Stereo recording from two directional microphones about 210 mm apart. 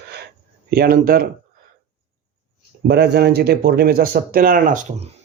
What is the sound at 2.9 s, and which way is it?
Speech, 50° right (ahead or behind).